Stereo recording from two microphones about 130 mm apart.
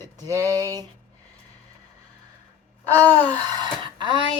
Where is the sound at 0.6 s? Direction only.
25° right (ahead or behind).